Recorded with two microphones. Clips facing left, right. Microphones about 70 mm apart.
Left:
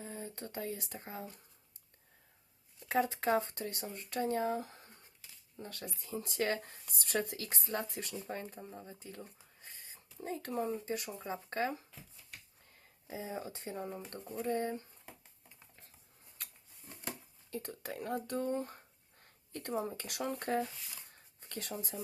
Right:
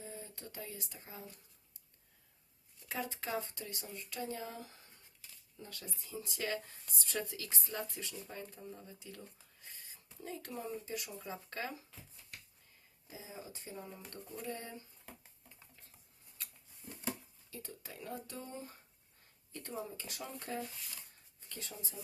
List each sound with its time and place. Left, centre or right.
0.0 s speech: left
2.9 s speech: left
6.9 s speech: left
8.6 s speech: left
13.1 s speech: left
17.5 s speech: left
19.2 s a sound: left
20.0 s speech: left
21.4 s a sound: left
21.8 s speech: left